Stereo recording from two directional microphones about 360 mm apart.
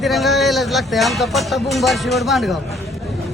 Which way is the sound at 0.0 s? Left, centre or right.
Centre.